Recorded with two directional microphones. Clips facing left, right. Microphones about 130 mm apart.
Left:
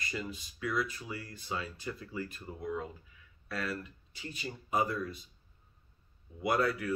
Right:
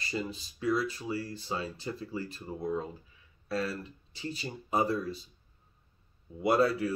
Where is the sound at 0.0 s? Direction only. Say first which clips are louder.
Right 4 dB; 30° right (ahead or behind).